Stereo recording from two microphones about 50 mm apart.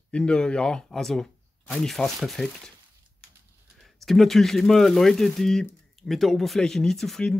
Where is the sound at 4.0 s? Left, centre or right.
Centre.